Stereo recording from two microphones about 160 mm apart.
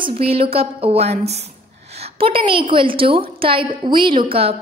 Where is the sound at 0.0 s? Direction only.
35° right (ahead or behind).